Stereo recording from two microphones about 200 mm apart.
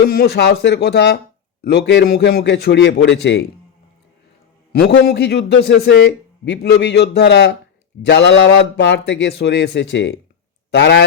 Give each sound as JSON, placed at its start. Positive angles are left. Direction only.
{"t": 0.0, "sound": "a man's voice", "side_deg": 55}
{"t": 4.7, "sound": "a man's voice", "side_deg": 55}